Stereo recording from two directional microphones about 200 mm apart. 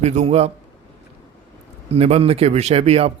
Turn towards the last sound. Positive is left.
turn(degrees=-30)  # may be behind; listen again after turning